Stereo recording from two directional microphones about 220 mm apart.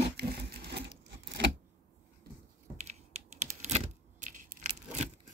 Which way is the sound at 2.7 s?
30° right (ahead or behind).